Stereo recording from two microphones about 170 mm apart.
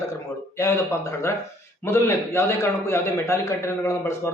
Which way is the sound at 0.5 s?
15° left (ahead or behind).